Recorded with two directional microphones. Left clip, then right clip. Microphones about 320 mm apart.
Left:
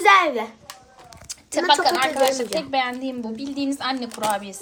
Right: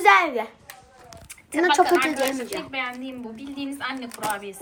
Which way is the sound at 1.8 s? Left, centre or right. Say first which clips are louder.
Left 3 dB; centre.